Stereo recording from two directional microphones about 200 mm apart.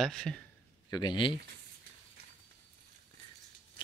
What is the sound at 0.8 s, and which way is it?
Speech, 20° left (ahead or behind).